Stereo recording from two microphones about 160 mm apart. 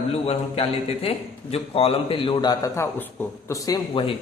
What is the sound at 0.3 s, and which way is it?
A man's voice, 35° left (ahead or behind).